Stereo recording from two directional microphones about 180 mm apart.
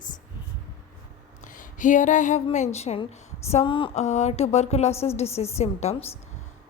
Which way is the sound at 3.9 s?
40° left (ahead or behind).